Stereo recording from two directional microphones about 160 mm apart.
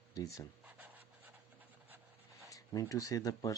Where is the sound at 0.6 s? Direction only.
10° right (ahead or behind).